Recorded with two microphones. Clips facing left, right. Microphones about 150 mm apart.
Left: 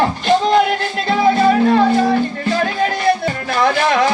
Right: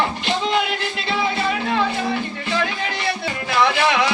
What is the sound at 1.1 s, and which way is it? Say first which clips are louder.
Music: left 10 dB; 45° left (ahead or behind).